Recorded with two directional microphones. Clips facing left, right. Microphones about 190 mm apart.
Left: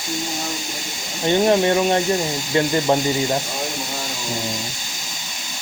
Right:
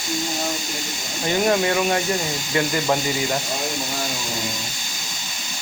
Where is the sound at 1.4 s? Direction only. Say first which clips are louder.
Left 2 dB; 25° left (ahead or behind).